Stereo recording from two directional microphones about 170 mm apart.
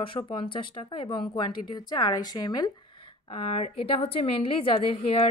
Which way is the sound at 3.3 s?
35° left (ahead or behind).